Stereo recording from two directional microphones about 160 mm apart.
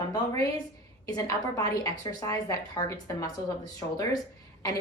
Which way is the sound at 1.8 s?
20° left (ahead or behind).